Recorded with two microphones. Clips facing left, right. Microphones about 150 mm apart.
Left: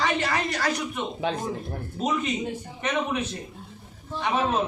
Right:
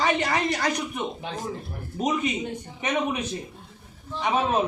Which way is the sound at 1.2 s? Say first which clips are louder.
Left 7 dB; 90° left.